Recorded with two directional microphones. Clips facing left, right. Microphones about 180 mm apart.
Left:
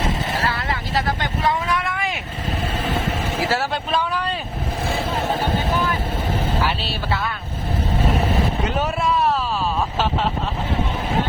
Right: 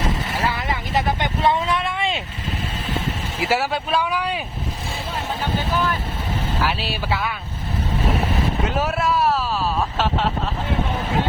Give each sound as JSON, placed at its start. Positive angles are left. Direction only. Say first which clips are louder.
{"t": 0.4, "sound": "vehicle", "louder": "even", "side_deg": -15}
{"t": 3.5, "sound": "speech", "louder": "right 5 dB", "side_deg": -10}
{"t": 6.8, "sound": "speech", "louder": "even", "side_deg": -5}
{"t": 8.6, "sound": "speech", "louder": "even", "side_deg": -5}